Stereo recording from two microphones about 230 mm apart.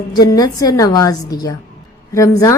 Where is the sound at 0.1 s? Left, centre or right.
Centre.